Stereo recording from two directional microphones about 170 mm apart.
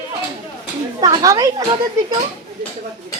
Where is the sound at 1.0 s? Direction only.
20° right (ahead or behind).